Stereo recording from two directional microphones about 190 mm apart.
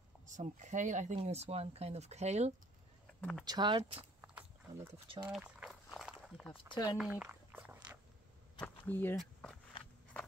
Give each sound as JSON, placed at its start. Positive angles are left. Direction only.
{"t": 0.3, "sound": "speech", "side_deg": -40}
{"t": 3.2, "sound": "speech", "side_deg": 5}
{"t": 3.4, "sound": "speech", "side_deg": -25}
{"t": 4.2, "sound": "walk", "side_deg": -5}
{"t": 4.9, "sound": "speech", "side_deg": -30}
{"t": 5.2, "sound": "a sound", "side_deg": -5}
{"t": 6.5, "sound": "speech", "side_deg": 20}
{"t": 7.0, "sound": "a sound", "side_deg": -5}
{"t": 8.5, "sound": "speech", "side_deg": 10}
{"t": 9.1, "sound": "a sound", "side_deg": 0}